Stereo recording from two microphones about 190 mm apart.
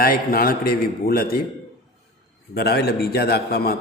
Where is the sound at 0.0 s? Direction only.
50° left (ahead or behind).